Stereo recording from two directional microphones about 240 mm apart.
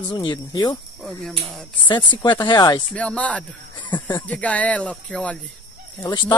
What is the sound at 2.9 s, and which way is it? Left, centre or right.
Speech, centre.